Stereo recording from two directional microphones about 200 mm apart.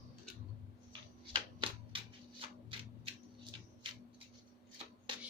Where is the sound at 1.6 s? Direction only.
25° right (ahead or behind).